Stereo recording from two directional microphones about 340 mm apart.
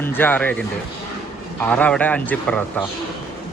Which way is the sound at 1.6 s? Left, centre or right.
Centre.